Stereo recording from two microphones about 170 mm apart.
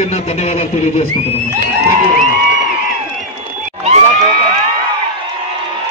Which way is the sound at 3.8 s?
40° right (ahead or behind).